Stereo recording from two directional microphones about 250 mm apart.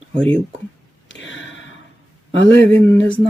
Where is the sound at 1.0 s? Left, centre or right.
Left.